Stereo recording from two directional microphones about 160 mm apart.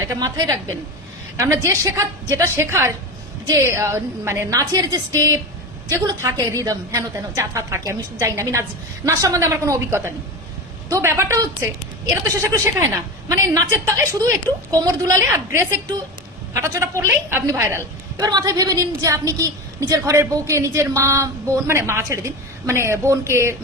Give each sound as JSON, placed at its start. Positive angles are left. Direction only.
{"t": 0.2, "sound": "a woman's voice", "side_deg": -20}